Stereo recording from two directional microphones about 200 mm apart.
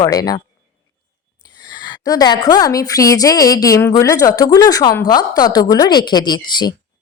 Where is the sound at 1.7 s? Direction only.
20° left (ahead or behind).